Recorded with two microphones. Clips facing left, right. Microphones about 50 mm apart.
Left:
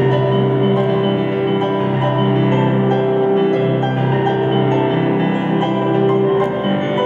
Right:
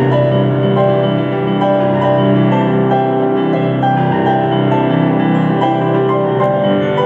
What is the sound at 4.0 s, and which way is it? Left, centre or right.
Music, right.